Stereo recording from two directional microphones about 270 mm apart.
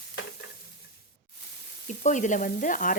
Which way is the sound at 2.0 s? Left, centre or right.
Left.